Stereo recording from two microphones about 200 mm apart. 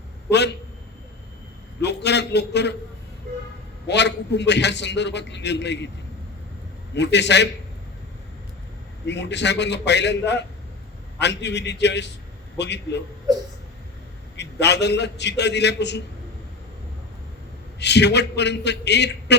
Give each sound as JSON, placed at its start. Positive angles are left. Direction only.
{"t": 0.3, "sound": "a man's voice", "side_deg": 60}
{"t": 1.8, "sound": "a man's voice", "side_deg": 55}
{"t": 3.8, "sound": "a man's voice", "side_deg": 60}
{"t": 6.9, "sound": "a man's voice", "side_deg": 60}
{"t": 9.0, "sound": "a man's voice", "side_deg": 60}
{"t": 14.3, "sound": "a man's voice", "side_deg": 60}
{"t": 17.7, "sound": "a man's voice", "side_deg": 60}